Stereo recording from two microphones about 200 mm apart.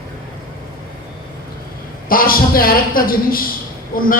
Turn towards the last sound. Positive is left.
turn(degrees=45)  # may be behind; listen again after turning